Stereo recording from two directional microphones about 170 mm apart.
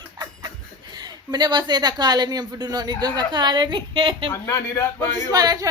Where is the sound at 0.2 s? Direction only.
25° right (ahead or behind).